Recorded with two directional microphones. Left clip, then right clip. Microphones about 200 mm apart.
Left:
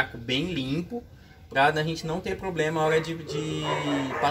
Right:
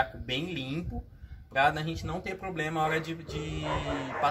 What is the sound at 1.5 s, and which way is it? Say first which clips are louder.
Speech: left 4 dB; 20° right (ahead or behind).